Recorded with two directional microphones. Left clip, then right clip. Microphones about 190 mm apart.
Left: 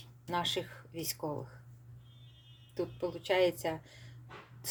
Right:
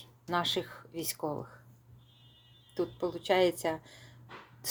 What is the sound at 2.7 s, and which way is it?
Speech, 25° right (ahead or behind).